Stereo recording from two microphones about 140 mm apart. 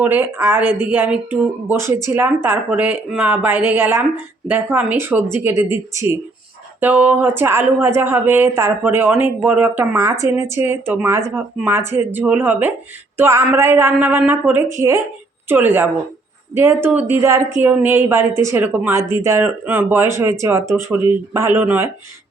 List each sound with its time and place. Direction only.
0.0 s speech: 15° right (ahead or behind)